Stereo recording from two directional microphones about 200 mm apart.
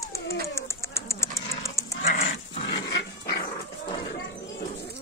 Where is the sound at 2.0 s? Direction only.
35° left (ahead or behind).